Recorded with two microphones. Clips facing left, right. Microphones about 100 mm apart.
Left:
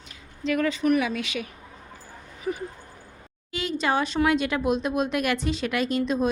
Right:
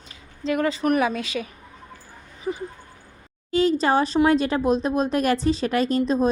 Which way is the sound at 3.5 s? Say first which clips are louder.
Right 6 dB; 40° right (ahead or behind).